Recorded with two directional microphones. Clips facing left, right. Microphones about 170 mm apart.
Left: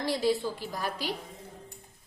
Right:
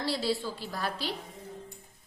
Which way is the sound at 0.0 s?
15° left (ahead or behind).